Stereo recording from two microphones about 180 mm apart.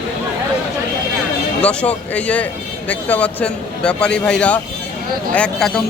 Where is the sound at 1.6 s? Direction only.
5° left (ahead or behind).